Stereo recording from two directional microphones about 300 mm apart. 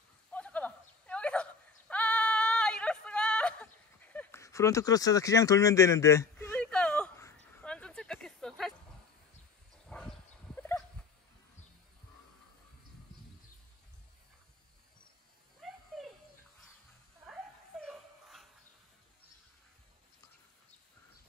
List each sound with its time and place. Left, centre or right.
0.3 s whimper: centre
7.6 s a sound: centre
9.8 s dog: centre
17.3 s dog: centre